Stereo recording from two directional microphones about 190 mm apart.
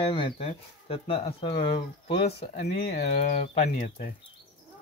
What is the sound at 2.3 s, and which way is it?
Speech, 60° left (ahead or behind).